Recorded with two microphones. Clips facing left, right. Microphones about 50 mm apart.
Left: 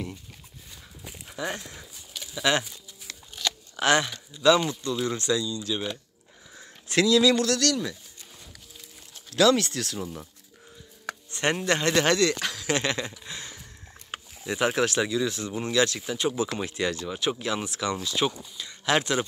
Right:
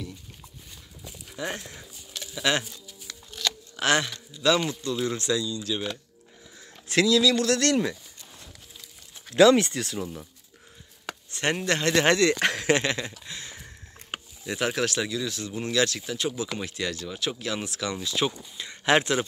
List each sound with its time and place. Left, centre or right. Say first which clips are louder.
1.3 s a sound: left 1 dB; centre
3.7 s a man's voice: left 2 dB; centre
7.2 s speech: left 1 dB; centre
7.4 s speech: right 2 dB; centre
9.3 s speech: right 3 dB; centre
11.2 s a sound: left 1 dB; centre
11.6 s speech: even; centre
12.0 s speech: right 4 dB; centre
12.4 s a sound: right 6 dB; right
12.7 s speech: right 1 dB; centre
18.6 s speech: right 3 dB; centre